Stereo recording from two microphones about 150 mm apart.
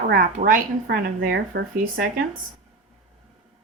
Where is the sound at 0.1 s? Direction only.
65° right (ahead or behind).